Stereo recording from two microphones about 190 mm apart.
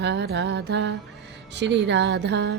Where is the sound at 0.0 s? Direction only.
65° right (ahead or behind).